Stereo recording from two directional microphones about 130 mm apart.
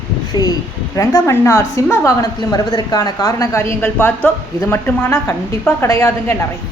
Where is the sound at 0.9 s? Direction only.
20° left (ahead or behind).